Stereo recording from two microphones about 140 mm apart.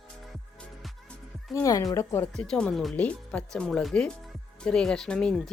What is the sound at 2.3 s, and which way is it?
A woman's voice, 5° left (ahead or behind).